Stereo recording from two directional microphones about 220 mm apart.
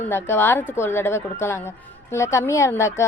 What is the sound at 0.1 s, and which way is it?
A woman's voice, 10° left (ahead or behind).